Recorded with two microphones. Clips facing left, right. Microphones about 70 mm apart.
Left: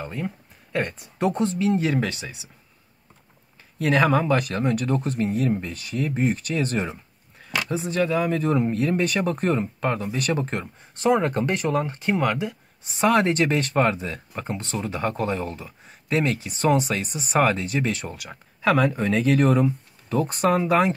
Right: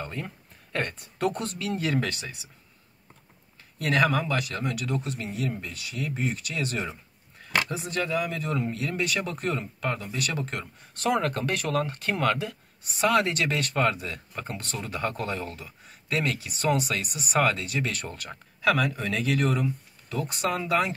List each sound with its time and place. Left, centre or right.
0.0 s speech: centre
3.8 s speech: centre
4.4 s speech: left
7.9 s speech: centre
8.2 s speech: left
13.0 s speech: left
18.0 s speech: centre
18.6 s speech: left